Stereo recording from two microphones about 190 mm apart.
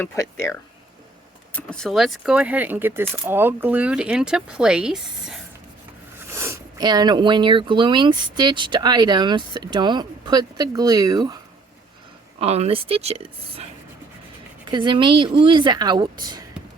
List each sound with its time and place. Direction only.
0.0 s speech: 15° left (ahead or behind)
1.5 s speech: 5° left (ahead or behind); by 11.3 s 20° right (ahead or behind)
12.4 s speech: 35° right (ahead or behind)
14.7 s speech: 25° right (ahead or behind)